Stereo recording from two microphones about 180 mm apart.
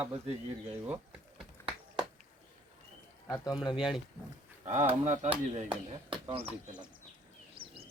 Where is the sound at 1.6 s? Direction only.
15° left (ahead or behind).